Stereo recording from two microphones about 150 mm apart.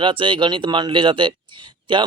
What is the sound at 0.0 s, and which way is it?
Speech, 35° right (ahead or behind).